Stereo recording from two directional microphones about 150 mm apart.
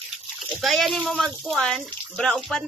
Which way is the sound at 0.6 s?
Centre (ahead or behind).